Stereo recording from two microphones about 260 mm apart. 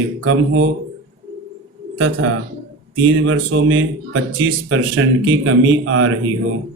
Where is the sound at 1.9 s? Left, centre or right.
Right.